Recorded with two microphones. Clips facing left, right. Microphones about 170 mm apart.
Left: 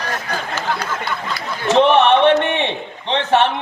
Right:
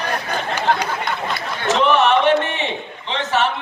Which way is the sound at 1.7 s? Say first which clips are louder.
Left 4 dB; 60° left (ahead or behind).